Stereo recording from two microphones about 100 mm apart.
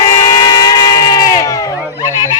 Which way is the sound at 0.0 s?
40° left (ahead or behind).